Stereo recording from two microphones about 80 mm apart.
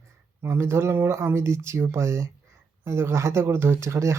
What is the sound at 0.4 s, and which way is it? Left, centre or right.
Speech, right.